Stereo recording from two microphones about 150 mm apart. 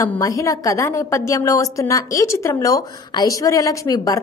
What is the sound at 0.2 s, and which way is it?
A woman's voice, 20° left (ahead or behind).